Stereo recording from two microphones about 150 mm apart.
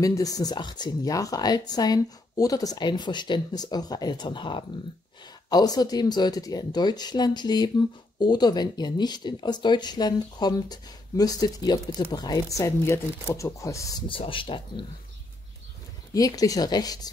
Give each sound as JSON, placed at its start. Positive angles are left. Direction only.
{"t": 0.0, "sound": "speech", "side_deg": 25}
{"t": 14.0, "sound": "speech", "side_deg": 35}
{"t": 16.1, "sound": "speech", "side_deg": 25}